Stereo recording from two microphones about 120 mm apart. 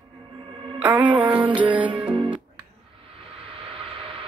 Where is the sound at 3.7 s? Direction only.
50° right (ahead or behind).